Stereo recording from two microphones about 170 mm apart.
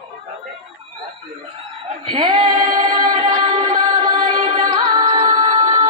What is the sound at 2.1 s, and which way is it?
Female singing, 25° right (ahead or behind).